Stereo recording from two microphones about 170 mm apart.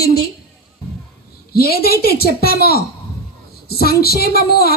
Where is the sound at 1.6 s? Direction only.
65° left (ahead or behind).